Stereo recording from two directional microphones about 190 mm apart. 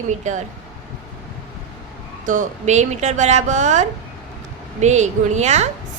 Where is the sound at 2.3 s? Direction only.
40° right (ahead or behind).